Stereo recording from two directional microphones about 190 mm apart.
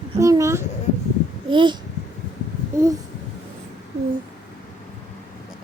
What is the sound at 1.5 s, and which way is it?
Speech, 25° right (ahead or behind).